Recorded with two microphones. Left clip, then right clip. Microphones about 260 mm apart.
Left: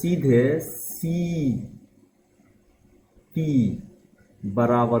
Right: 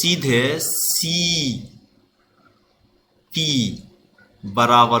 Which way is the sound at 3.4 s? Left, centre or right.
Right.